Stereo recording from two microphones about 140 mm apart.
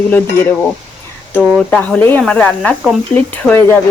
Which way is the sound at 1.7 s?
10° left (ahead or behind).